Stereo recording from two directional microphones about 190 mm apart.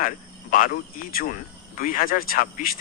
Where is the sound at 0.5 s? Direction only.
45° left (ahead or behind).